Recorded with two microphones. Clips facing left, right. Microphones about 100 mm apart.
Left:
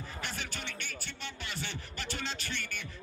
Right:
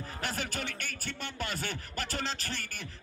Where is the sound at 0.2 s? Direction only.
45° right (ahead or behind).